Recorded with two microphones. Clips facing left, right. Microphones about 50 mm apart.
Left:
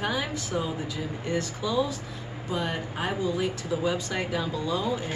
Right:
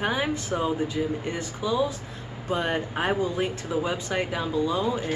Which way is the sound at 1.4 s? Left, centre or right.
Centre.